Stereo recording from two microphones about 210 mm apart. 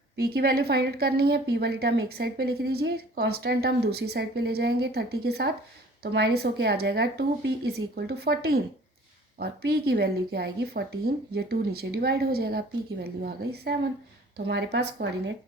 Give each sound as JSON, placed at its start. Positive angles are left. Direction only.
{"t": 0.3, "sound": "a woman's voice", "side_deg": -50}